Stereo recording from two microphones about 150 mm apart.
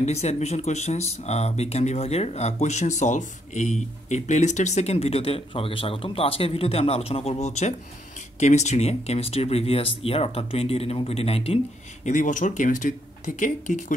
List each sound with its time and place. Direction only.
0.0 s speech: 45° left (ahead or behind)